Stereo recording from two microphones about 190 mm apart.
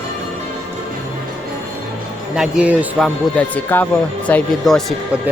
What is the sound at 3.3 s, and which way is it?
A man's voice, 10° left (ahead or behind).